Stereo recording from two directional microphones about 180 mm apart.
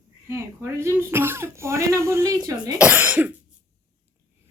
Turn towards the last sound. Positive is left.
turn(degrees=-10)  # may be behind; listen again after turning